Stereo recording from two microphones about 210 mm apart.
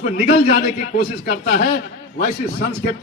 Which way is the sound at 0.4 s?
45° left (ahead or behind).